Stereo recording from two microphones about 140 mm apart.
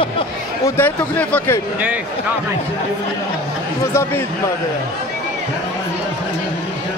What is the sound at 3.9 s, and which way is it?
Speech, 20° left (ahead or behind).